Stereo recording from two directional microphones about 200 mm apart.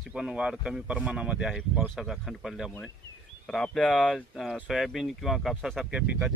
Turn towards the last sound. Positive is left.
turn(degrees=-5)  # may be behind; listen again after turning